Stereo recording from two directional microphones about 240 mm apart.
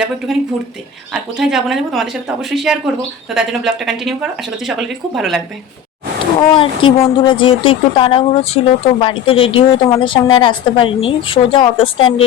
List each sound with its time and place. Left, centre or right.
0.3 s speech: centre
6.5 s speech: left